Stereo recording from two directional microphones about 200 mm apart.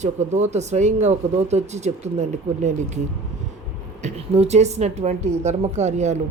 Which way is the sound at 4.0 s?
30° right (ahead or behind).